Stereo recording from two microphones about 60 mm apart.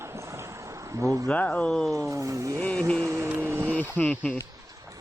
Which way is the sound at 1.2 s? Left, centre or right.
Left.